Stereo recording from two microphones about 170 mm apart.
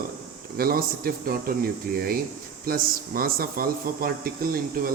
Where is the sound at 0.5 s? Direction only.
60° right (ahead or behind).